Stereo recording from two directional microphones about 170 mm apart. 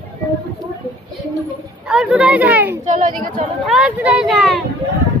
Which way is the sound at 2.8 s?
45° right (ahead or behind).